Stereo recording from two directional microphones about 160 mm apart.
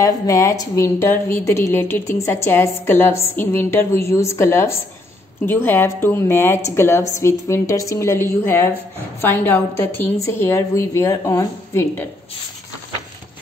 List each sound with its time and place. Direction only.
0.0 s speech: 20° left (ahead or behind)